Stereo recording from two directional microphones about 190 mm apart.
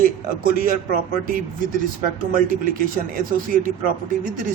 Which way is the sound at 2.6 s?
45° right (ahead or behind).